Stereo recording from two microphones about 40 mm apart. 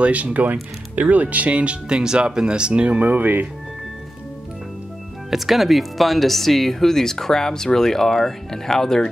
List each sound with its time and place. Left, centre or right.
0.0 s speech: right
3.0 s speech: right
5.3 s speech: centre